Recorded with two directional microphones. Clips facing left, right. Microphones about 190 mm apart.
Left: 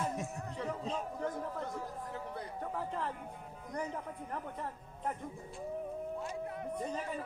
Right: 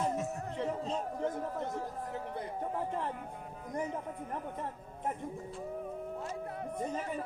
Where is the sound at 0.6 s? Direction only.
25° right (ahead or behind).